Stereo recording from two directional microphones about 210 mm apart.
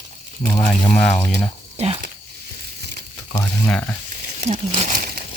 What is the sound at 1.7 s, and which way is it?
Speech, 30° right (ahead or behind).